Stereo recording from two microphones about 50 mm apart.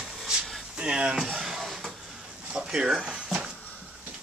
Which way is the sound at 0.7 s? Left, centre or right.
Centre.